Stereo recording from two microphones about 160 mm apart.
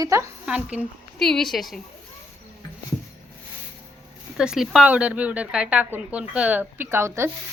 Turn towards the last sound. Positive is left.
turn(degrees=-15)  # may be behind; listen again after turning